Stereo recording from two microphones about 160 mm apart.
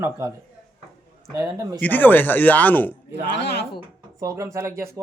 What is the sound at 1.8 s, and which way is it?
Speech, 10° left (ahead or behind).